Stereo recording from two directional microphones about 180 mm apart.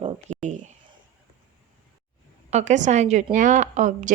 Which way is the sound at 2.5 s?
40° right (ahead or behind).